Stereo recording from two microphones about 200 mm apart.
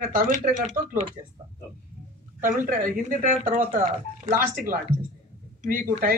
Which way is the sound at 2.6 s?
40° right (ahead or behind).